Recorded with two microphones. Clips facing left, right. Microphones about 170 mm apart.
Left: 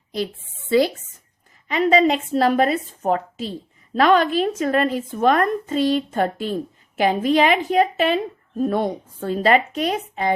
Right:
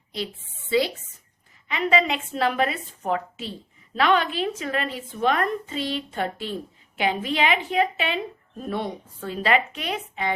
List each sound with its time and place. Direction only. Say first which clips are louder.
1.6 s a woman's voice: left 6 dB; 40° left (ahead or behind)